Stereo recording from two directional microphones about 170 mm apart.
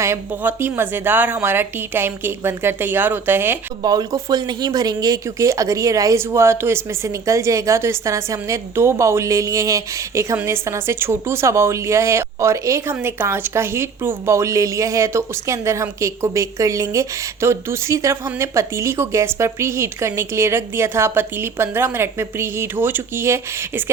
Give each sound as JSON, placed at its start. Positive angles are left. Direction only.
{"t": 0.0, "sound": "speech", "side_deg": -15}
{"t": 3.8, "sound": "speech", "side_deg": -25}